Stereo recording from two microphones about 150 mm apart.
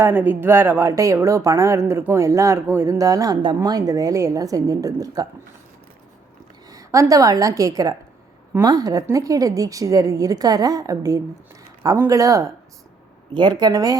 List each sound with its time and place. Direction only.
0.0 s speech: 15° right (ahead or behind)
6.7 s a woman's voice: 20° right (ahead or behind)